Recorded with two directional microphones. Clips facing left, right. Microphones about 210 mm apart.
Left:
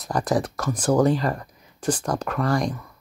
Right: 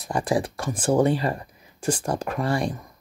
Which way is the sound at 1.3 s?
15° right (ahead or behind).